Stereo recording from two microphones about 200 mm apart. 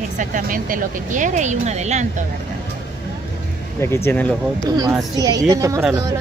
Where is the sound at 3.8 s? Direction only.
10° left (ahead or behind).